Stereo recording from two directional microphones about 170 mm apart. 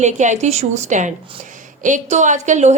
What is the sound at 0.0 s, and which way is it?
A woman's voice, 45° right (ahead or behind).